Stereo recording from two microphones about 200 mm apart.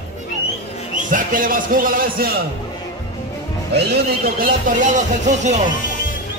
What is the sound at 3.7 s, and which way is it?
Speech, 50° right (ahead or behind).